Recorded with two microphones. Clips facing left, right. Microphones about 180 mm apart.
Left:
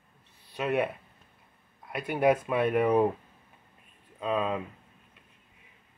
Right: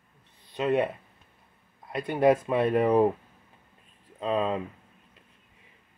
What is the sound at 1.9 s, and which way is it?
Speech, 25° right (ahead or behind).